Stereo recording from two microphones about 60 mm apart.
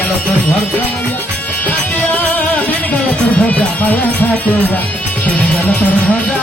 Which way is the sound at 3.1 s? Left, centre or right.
Left.